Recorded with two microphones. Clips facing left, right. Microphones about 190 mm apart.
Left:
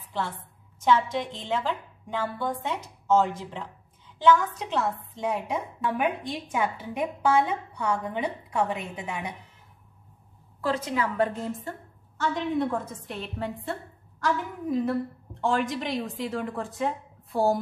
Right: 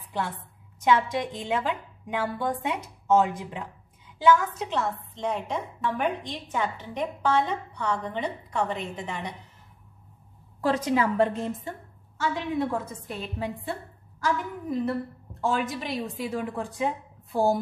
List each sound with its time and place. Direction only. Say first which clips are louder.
0.8 s a woman's voice: even; 10° right (ahead or behind); by 9.3 s 10° left (ahead or behind)
11.0 s a woman's voice: right 3 dB; 25° right (ahead or behind)
12.2 s a woman's voice: left 1 dB; 10° right (ahead or behind)